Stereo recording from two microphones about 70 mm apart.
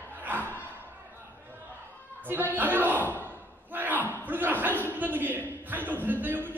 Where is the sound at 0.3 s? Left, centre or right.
Right.